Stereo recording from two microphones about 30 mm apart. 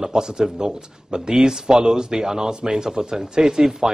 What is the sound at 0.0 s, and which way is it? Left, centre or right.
Speech, right.